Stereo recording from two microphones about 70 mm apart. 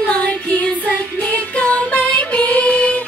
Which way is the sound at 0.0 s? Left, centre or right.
Centre.